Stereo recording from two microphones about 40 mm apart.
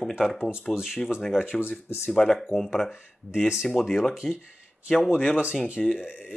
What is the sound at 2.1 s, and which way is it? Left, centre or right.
Speech, centre.